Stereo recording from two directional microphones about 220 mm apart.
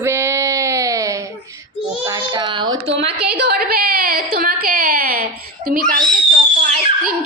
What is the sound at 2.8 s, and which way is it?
Speech, 25° right (ahead or behind).